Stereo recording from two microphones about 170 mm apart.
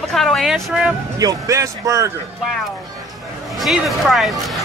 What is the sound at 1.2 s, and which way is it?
Speech, 20° right (ahead or behind).